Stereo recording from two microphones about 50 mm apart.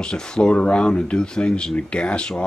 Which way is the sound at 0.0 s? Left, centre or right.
Centre.